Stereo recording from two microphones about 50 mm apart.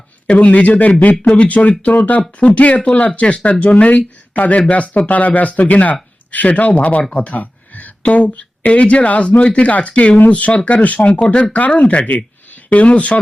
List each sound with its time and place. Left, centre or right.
0.3 s speech: left
1.1 s speech: centre
1.5 s speech: left